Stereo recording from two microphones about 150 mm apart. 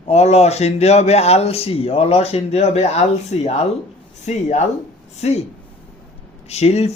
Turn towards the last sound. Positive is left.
turn(degrees=45)  # may be behind; listen again after turning